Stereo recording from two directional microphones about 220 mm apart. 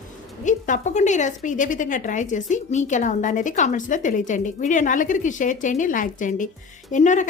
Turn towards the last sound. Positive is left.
turn(degrees=35)  # may be behind; listen again after turning